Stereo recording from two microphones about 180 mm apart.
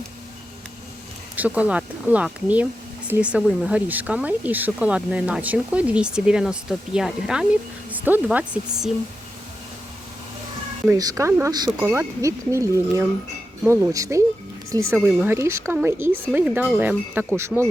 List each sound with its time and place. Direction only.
1.4 s speech: 10° right (ahead or behind)
10.8 s speech: 15° right (ahead or behind)